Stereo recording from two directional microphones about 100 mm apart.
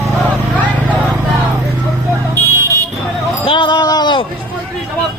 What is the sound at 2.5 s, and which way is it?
Vehicle, 30° right (ahead or behind).